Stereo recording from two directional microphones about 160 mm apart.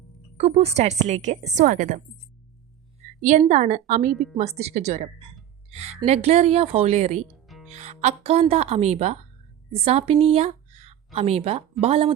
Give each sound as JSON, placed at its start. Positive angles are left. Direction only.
{"t": 0.3, "sound": "a woman's voice", "side_deg": -40}
{"t": 3.2, "sound": "a woman's voice", "side_deg": -50}
{"t": 4.1, "sound": "a woman's voice", "side_deg": 0}
{"t": 4.4, "sound": "a woman's voice", "side_deg": -40}
{"t": 7.4, "sound": "music", "side_deg": 0}
{"t": 7.7, "sound": "a woman's voice", "side_deg": -45}